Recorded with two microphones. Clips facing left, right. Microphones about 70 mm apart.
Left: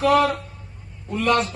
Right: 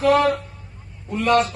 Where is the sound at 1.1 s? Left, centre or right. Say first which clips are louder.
Right 2 dB; right.